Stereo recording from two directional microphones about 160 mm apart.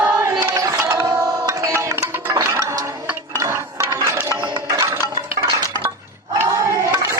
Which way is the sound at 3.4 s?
15° right (ahead or behind).